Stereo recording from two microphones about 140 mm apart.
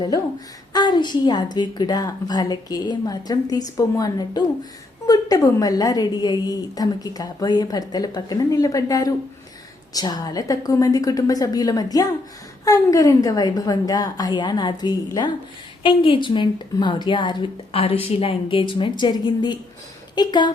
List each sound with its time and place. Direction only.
0.7 s a woman's voice: 30° left (ahead or behind)